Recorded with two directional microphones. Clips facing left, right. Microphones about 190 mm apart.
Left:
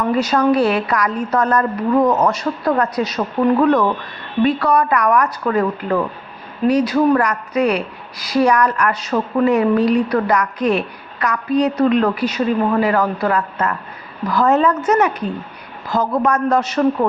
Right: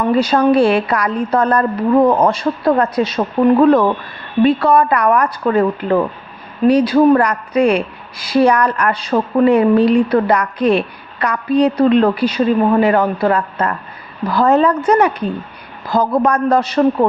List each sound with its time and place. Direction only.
0.2 s a woman's voice: 30° right (ahead or behind)